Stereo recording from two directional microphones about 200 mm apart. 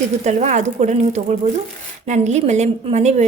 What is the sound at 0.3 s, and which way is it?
A woman's voice, 35° right (ahead or behind).